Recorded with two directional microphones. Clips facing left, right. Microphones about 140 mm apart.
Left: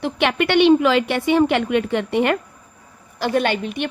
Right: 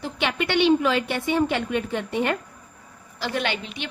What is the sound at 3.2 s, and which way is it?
Speech, 50° left (ahead or behind).